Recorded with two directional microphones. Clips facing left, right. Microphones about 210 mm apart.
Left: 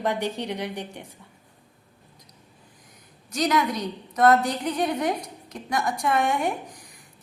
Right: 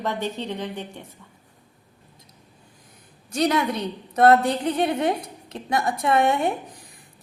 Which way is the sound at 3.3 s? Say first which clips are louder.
Right 2 dB; 30° right (ahead or behind).